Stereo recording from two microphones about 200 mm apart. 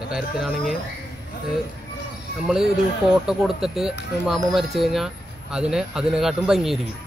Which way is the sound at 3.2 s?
Centre (ahead or behind).